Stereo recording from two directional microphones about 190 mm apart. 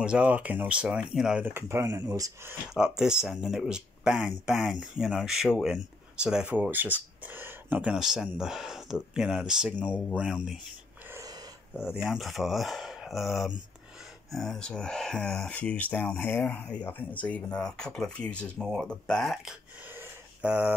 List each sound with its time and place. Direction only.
0.0 s speech: 5° right (ahead or behind)
3.0 s speech: 5° right (ahead or behind)
11.1 s wheeze: 15° right (ahead or behind)
11.7 s speech: 5° right (ahead or behind)
19.9 s a sound: 10° right (ahead or behind)